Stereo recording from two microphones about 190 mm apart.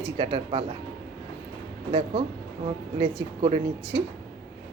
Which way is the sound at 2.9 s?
30° right (ahead or behind).